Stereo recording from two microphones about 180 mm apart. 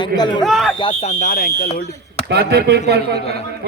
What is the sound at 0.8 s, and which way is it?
Speech, 35° left (ahead or behind).